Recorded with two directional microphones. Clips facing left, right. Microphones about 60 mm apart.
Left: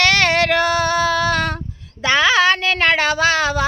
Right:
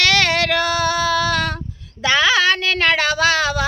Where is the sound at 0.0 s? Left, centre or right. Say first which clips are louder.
Left 2 dB; left.